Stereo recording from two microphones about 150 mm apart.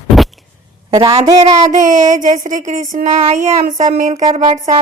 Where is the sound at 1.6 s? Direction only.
55° right (ahead or behind).